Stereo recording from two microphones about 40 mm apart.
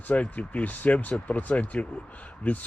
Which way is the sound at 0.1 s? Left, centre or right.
Left.